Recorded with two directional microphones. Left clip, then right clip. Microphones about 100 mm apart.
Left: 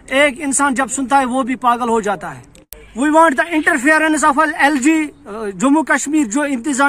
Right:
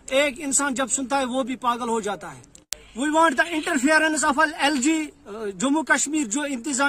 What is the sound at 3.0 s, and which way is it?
Speech, 30° right (ahead or behind).